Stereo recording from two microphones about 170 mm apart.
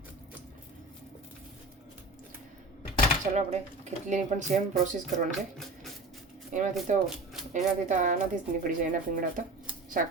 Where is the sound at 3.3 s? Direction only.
45° right (ahead or behind).